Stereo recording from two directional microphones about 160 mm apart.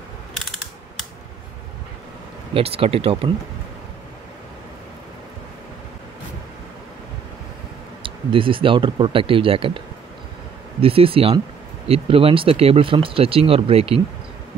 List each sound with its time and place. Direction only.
2.5 s speech: 35° right (ahead or behind)
8.0 s speech: 35° right (ahead or behind)